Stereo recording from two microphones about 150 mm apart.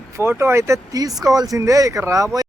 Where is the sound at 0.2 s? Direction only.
15° right (ahead or behind).